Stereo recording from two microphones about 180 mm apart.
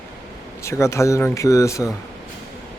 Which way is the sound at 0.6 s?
15° left (ahead or behind).